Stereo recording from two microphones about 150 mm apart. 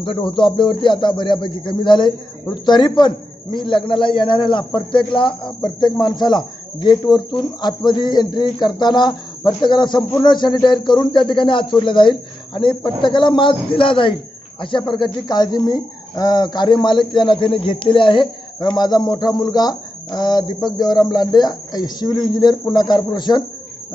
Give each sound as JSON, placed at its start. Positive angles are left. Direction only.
{"t": 0.0, "sound": "speech", "side_deg": 35}